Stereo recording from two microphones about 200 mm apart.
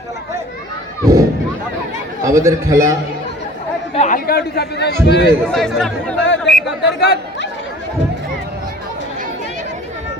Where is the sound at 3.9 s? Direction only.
35° left (ahead or behind); by 4.9 s 55° left (ahead or behind).